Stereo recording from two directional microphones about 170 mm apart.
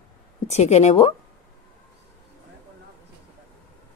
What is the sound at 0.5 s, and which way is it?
Speech, 40° left (ahead or behind).